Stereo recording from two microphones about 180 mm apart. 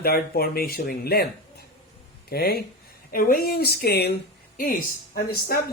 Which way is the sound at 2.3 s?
60° left (ahead or behind).